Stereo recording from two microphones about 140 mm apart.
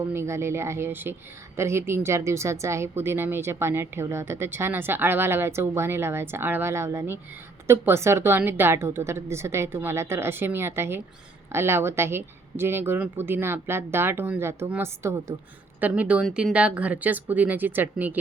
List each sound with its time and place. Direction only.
0.1 s speech: 20° right (ahead or behind)